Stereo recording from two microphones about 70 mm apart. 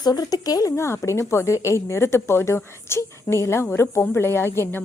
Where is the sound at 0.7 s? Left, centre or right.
Left.